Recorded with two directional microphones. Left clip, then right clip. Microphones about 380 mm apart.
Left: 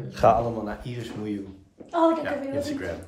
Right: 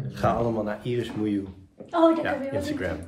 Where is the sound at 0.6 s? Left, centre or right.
Centre.